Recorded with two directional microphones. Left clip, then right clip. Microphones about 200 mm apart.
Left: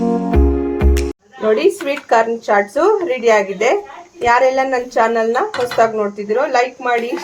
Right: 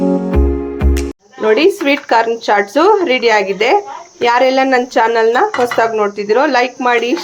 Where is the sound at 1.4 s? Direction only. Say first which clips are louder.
Right 3 dB; 20° right (ahead or behind).